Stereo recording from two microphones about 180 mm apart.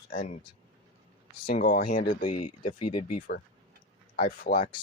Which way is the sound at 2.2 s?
35° left (ahead or behind).